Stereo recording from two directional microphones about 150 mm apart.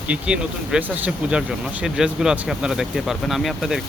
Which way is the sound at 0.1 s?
5° right (ahead or behind).